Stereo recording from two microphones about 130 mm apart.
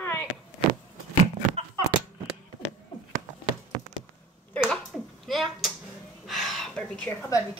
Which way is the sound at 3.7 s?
30° right (ahead or behind).